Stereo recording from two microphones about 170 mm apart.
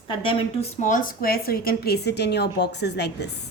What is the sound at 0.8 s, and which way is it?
A woman's voice, 50° left (ahead or behind).